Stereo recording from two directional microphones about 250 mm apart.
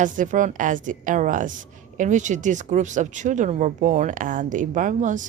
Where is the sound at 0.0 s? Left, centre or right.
Right.